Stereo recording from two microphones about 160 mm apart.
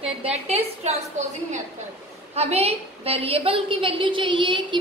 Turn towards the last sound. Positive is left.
turn(degrees=-30)  # may be behind; listen again after turning